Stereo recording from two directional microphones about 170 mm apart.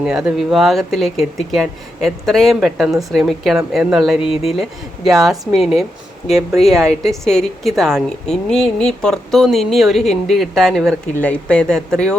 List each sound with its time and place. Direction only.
0.0 s a woman's voice: 5° right (ahead or behind)
4.2 s speech: 35° left (ahead or behind)
5.0 s a woman's voice: centre (ahead or behind)